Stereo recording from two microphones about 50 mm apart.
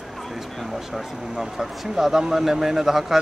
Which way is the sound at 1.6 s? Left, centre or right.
Centre.